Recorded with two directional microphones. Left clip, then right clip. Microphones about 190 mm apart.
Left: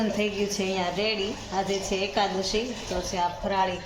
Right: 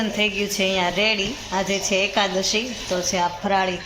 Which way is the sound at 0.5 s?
20° right (ahead or behind).